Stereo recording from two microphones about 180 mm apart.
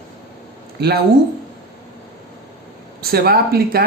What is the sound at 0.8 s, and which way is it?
Speech, 65° right (ahead or behind).